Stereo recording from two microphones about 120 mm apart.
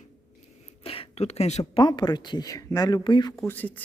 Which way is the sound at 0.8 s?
50° left (ahead or behind).